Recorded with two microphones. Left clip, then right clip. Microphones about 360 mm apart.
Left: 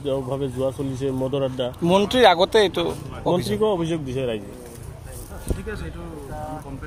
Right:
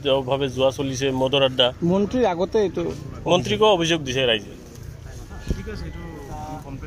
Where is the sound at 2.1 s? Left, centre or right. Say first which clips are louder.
Left 8 dB; left.